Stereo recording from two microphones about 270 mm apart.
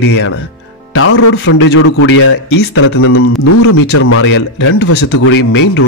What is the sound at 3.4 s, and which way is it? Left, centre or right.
Speech, left.